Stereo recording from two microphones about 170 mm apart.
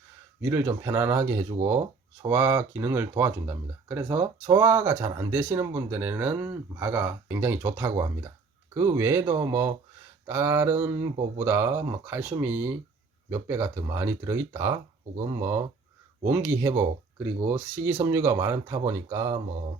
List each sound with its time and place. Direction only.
0.4 s speech: 15° right (ahead or behind)